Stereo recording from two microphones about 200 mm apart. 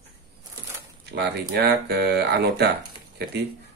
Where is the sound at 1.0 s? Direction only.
55° right (ahead or behind).